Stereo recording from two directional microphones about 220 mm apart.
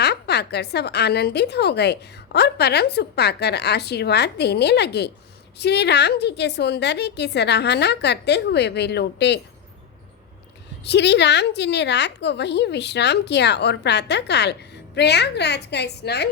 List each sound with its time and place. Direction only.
0.0 s a woman's voice: 50° left (ahead or behind)
10.8 s a woman's voice: 50° left (ahead or behind)